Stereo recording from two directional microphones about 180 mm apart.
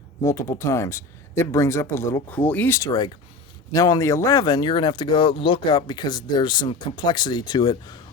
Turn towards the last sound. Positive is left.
turn(degrees=25)  # may be behind; listen again after turning